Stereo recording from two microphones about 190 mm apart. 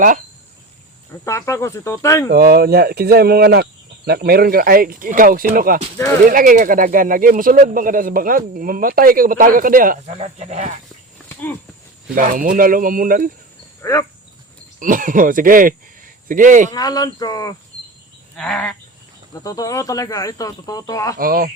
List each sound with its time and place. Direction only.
1.2 s speech: 15° left (ahead or behind)
2.3 s speech: 55° right (ahead or behind)
10.2 s speech: 35° right (ahead or behind)
12.1 s speech: 45° right (ahead or behind)
13.8 s speech: 15° left (ahead or behind)
14.8 s speech: 45° right (ahead or behind)
16.7 s speech: 20° left (ahead or behind)
18.3 s a sound: 5° left (ahead or behind)
19.3 s speech: 20° left (ahead or behind)
21.2 s speech: 50° right (ahead or behind)